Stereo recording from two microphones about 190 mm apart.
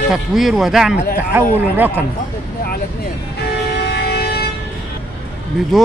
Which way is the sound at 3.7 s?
55° left (ahead or behind).